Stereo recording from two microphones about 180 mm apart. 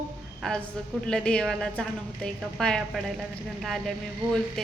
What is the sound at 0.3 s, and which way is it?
A woman's voice, 5° left (ahead or behind).